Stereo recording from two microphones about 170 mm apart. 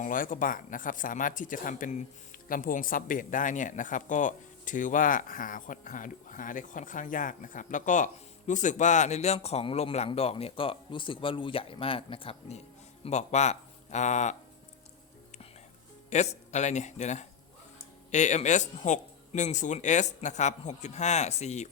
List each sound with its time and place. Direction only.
0.0 s speech: 55° left (ahead or behind)
16.0 s speech: 40° left (ahead or behind)